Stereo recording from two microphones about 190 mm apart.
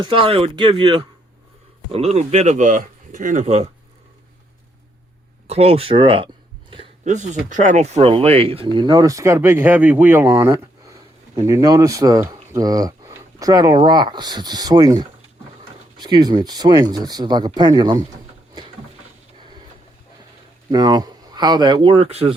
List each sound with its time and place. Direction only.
0.0 s speech: 30° right (ahead or behind)
5.5 s speech: 30° right (ahead or behind)
20.7 s speech: 20° right (ahead or behind)